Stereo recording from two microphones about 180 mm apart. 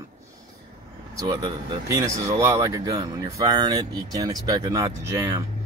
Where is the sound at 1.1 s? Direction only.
20° right (ahead or behind).